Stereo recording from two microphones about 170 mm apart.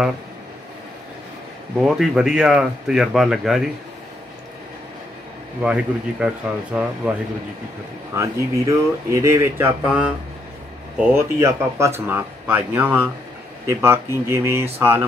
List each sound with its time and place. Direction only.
1.8 s speech: 5° right (ahead or behind)
5.6 s speech: 5° right (ahead or behind)